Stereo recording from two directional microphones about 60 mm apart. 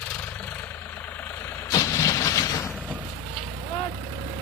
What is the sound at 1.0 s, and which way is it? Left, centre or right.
Vehicle, left.